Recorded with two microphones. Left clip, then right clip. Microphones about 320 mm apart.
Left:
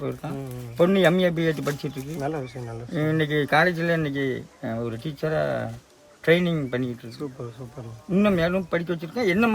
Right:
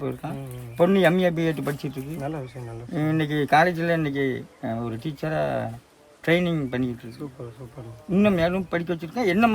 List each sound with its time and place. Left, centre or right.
0.8 s speech: centre
2.1 s speech: left
2.9 s speech: centre
7.2 s speech: left
8.1 s speech: centre